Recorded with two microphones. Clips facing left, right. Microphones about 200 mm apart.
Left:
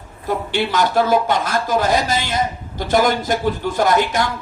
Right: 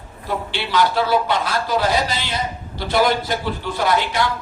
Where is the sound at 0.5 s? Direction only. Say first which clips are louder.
Left 2 dB; 45° left (ahead or behind).